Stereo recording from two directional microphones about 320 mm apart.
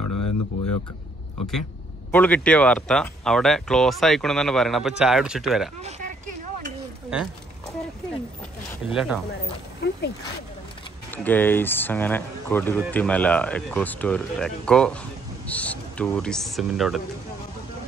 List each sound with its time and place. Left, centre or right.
0.0 s a sound: left
2.0 s speech: centre
5.8 s a sound: right
7.1 s speech: centre
8.8 s speech: centre
11.1 s speech: centre